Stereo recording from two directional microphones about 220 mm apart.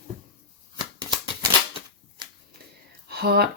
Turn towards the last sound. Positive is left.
turn(degrees=-45)  # may be behind; listen again after turning